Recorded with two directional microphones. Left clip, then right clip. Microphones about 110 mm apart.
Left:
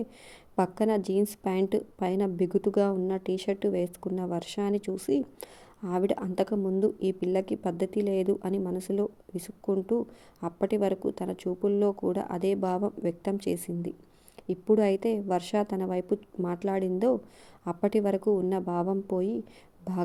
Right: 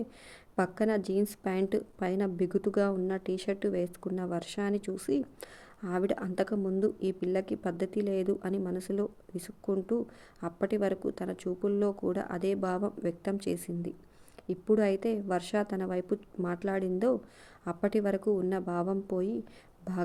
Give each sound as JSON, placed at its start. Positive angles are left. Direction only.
{"t": 0.5, "sound": "a woman's voice", "side_deg": 30}